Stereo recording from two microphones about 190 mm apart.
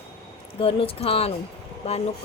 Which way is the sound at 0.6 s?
30° left (ahead or behind).